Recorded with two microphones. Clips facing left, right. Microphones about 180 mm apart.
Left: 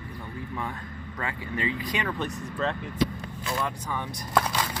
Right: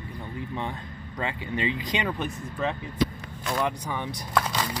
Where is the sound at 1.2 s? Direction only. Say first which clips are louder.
Right 2 dB; 20° right (ahead or behind).